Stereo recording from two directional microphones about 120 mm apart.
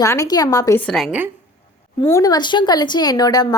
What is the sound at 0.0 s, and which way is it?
Speech, 25° left (ahead or behind).